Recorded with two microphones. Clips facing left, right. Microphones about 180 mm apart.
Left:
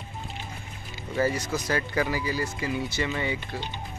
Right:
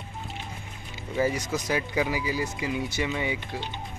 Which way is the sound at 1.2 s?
15° right (ahead or behind).